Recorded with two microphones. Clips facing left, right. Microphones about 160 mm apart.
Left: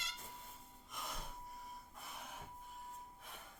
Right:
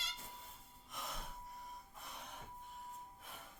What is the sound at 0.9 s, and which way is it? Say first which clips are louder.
Gasp: even; centre (ahead or behind).